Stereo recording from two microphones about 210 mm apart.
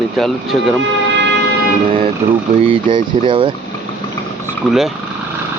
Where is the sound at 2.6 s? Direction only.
25° right (ahead or behind).